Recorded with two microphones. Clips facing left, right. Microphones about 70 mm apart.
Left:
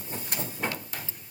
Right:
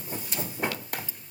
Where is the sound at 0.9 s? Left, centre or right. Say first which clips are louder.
Right 4 dB; right.